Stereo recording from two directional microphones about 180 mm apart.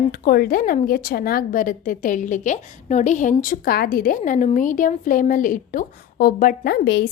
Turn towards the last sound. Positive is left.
turn(degrees=60)  # may be behind; listen again after turning